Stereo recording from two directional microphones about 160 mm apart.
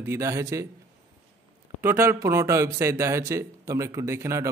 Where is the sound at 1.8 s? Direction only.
15° right (ahead or behind).